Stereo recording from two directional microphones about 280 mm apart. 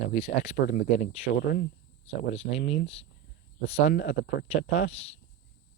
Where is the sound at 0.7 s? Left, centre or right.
Left.